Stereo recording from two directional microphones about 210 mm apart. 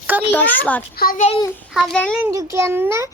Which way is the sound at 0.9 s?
40° left (ahead or behind).